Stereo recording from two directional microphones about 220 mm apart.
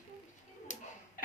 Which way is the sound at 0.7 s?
35° left (ahead or behind).